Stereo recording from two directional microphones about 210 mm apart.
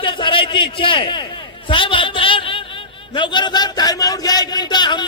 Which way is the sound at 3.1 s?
20° left (ahead or behind).